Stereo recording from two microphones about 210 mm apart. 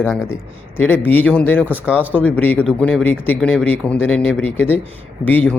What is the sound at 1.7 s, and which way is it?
Speech, 10° right (ahead or behind).